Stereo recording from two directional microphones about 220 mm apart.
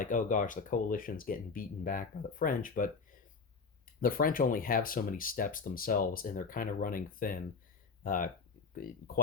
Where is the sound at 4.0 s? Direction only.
40° left (ahead or behind).